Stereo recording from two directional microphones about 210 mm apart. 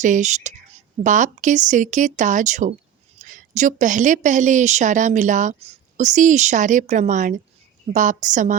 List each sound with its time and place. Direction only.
0.0 s a woman's voice: 35° right (ahead or behind)